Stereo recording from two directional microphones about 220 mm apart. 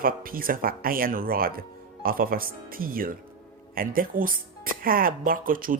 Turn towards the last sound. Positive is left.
turn(degrees=-40)  # may be behind; listen again after turning